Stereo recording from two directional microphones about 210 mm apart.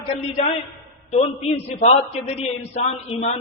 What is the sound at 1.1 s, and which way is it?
A man's voice, 30° left (ahead or behind).